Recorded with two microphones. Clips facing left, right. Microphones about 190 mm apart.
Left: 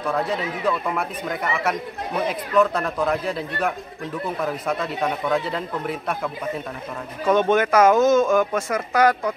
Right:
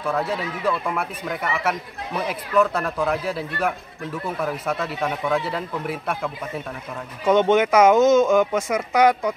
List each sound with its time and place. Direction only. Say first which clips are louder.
0.3 s speech: left 1 dB; 5° right (ahead or behind)
7.2 s speech: right 1 dB; 20° right (ahead or behind)